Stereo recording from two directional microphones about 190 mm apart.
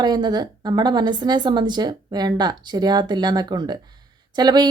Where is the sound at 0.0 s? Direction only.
20° right (ahead or behind).